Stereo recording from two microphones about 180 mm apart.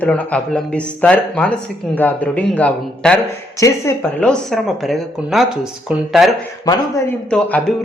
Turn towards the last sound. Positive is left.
turn(degrees=10)  # may be behind; listen again after turning